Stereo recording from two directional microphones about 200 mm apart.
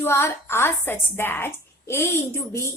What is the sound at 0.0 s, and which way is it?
A woman's voice, 10° left (ahead or behind).